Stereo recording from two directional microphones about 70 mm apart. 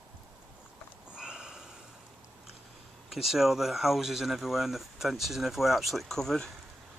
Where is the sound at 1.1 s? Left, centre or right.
Centre.